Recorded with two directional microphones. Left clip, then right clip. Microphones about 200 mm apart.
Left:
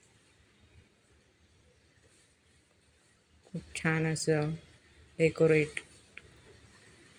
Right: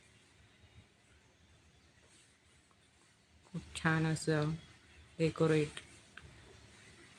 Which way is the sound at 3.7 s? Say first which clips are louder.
Left 3 dB; 5° left (ahead or behind).